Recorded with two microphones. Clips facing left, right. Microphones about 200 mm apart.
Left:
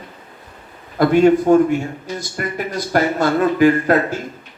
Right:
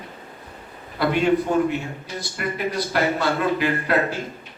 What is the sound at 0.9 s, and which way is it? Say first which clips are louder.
Speech: left 7 dB; 45° left (ahead or behind).